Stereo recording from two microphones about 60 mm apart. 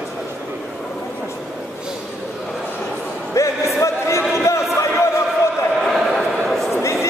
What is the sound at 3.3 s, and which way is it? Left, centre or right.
Music, left.